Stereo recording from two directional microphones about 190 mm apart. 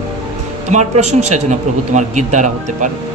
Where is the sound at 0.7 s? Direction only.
35° right (ahead or behind).